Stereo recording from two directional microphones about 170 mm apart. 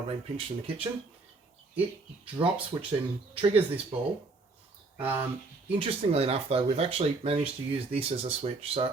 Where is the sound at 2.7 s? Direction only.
20° right (ahead or behind).